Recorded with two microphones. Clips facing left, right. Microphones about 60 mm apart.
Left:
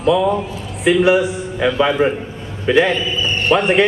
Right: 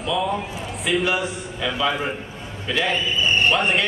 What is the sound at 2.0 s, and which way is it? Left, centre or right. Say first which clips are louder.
Speech: left 11 dB; left.